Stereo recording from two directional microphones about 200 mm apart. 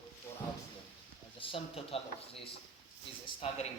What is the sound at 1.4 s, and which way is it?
Speech, 25° left (ahead or behind).